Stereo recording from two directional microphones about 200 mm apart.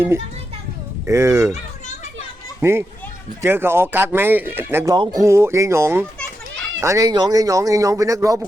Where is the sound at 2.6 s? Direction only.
10° right (ahead or behind).